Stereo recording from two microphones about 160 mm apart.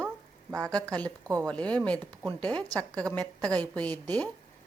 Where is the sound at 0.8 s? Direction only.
10° left (ahead or behind).